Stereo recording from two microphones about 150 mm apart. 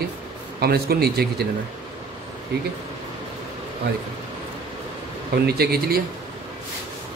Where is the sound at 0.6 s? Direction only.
90° right.